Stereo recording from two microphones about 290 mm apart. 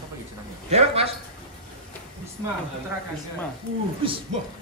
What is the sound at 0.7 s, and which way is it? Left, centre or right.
Speech, right.